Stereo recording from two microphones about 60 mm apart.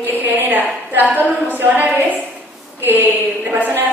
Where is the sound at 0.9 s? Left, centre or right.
Right.